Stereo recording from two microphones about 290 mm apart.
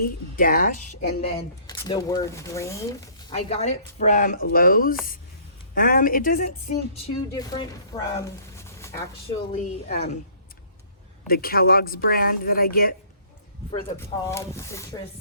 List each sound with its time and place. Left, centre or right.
0.0 s speech: left
1.2 s speech: centre
3.3 s speech: left
7.3 s speech: centre
11.3 s a woman's voice: left
14.0 s speech: centre